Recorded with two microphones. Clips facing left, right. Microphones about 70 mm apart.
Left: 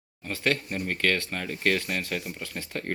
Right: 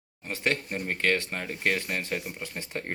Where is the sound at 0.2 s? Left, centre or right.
Right.